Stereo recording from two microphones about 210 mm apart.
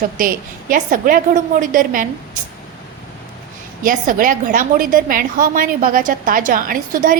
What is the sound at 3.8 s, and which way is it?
A woman's voice, 40° right (ahead or behind).